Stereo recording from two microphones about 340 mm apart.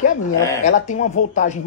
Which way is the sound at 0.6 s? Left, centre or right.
Left.